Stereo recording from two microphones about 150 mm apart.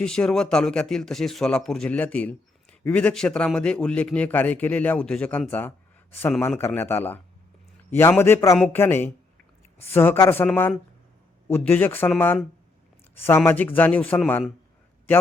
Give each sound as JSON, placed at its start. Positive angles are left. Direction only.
{"t": 0.0, "sound": "a man's voice", "side_deg": 5}